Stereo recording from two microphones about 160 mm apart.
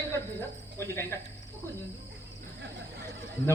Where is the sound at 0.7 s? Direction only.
15° left (ahead or behind).